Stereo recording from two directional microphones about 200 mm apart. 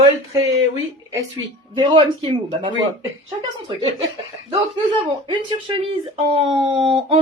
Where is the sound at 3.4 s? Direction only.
25° right (ahead or behind).